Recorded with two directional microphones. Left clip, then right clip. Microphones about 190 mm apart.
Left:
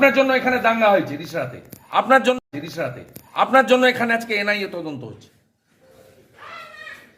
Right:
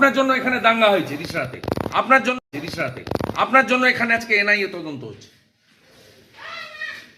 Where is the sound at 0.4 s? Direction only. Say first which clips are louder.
Even; 5° right (ahead or behind).